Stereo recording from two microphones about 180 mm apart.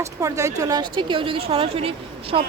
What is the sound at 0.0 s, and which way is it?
A woman's voice, 15° right (ahead or behind).